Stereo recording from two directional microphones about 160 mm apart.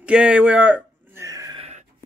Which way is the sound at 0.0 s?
5° right (ahead or behind).